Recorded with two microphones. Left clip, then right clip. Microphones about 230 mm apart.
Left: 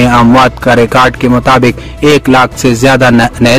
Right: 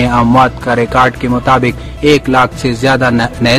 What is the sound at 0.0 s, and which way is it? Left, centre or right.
Speech, left.